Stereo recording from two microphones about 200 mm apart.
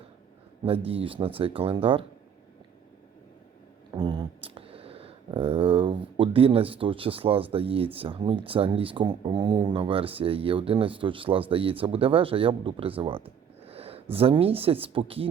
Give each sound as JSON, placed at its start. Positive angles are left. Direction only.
{"t": 0.9, "sound": "speech", "side_deg": -30}
{"t": 3.9, "sound": "speech", "side_deg": -25}